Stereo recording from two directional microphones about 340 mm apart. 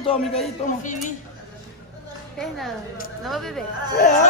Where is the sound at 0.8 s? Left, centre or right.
Left.